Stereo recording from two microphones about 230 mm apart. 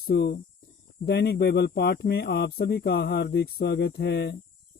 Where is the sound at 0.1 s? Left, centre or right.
Left.